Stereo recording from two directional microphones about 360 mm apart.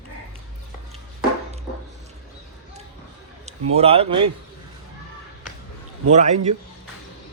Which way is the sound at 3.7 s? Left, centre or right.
Centre.